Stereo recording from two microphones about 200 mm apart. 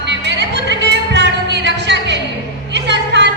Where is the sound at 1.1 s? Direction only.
60° right (ahead or behind).